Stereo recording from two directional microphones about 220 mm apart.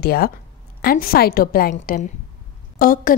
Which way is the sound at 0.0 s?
45° left (ahead or behind).